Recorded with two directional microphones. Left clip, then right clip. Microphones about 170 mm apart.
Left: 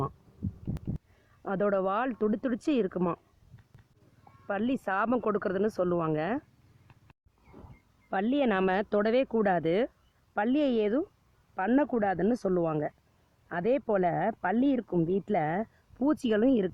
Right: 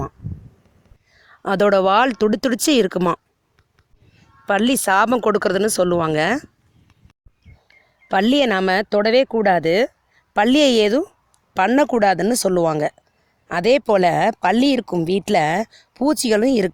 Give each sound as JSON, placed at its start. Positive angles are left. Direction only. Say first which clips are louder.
{"t": 1.4, "sound": "speech", "louder": "right 13 dB", "side_deg": -50}
{"t": 4.4, "sound": "speech", "louder": "right 14 dB", "side_deg": -55}
{"t": 8.1, "sound": "speech", "louder": "right 11 dB", "side_deg": -50}
{"t": 15.5, "sound": "speech", "louder": "right 11 dB", "side_deg": -45}
{"t": 16.0, "sound": "speech", "louder": "right 9 dB", "side_deg": -30}